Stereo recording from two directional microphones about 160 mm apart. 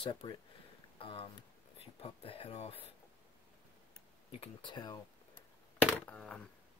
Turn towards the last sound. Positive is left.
turn(degrees=5)  # may be behind; listen again after turning